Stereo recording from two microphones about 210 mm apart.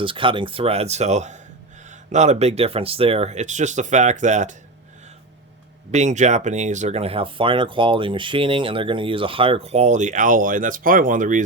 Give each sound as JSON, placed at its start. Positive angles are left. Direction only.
{"t": 0.0, "sound": "speech", "side_deg": -25}
{"t": 5.9, "sound": "speech", "side_deg": -35}